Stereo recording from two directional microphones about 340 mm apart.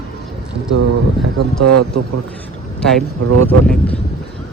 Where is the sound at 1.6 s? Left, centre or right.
Right.